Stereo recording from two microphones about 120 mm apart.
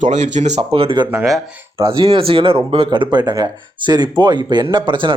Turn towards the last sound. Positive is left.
turn(degrees=-40)  # may be behind; listen again after turning